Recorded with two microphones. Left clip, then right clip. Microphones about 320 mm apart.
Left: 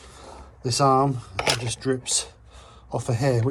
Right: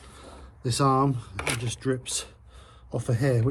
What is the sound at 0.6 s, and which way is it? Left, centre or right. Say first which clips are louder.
Speech: left 4 dB; centre.